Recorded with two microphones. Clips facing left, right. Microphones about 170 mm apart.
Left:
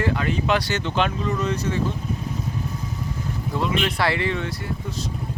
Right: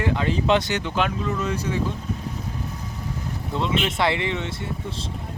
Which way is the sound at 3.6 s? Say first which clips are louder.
Even; 20° right (ahead or behind).